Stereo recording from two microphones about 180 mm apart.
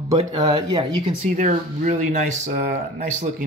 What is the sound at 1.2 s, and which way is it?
Speech, 45° right (ahead or behind).